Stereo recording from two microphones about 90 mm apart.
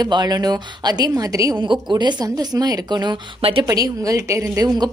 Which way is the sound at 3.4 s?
90° right.